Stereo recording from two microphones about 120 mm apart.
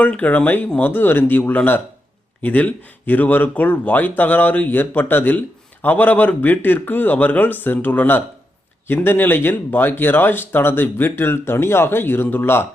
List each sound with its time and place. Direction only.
0.0 s speech: 10° left (ahead or behind)